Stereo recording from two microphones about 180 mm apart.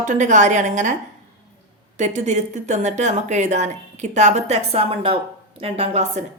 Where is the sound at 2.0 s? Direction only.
40° right (ahead or behind).